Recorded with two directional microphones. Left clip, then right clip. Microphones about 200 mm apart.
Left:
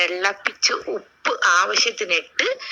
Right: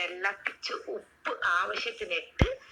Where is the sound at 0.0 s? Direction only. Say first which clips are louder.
Left 11 dB; 40° left (ahead or behind).